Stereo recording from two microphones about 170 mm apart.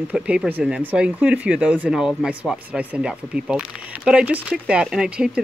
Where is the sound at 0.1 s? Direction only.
5° right (ahead or behind).